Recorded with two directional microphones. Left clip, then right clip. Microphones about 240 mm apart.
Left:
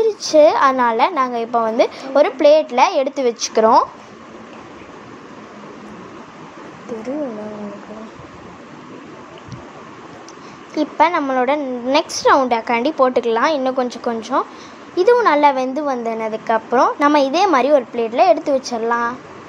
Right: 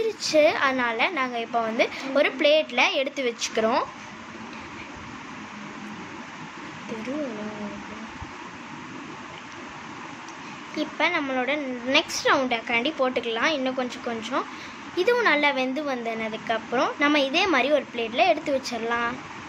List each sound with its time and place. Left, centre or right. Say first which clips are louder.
0.0 s a woman's voice: left 9 dB; centre
10.7 s a woman's voice: left 9 dB; left